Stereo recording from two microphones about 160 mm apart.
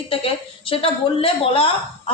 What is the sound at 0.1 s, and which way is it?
A woman's voice, 35° left (ahead or behind).